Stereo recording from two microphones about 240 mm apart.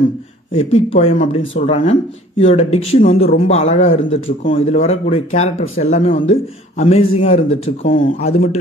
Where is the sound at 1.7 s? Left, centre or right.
Left.